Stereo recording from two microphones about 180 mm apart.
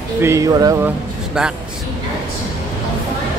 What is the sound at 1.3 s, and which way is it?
Speech, 5° right (ahead or behind).